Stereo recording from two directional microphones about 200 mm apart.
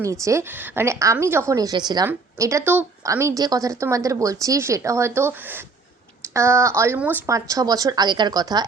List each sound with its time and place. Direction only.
0.0 s a woman's voice: 15° right (ahead or behind)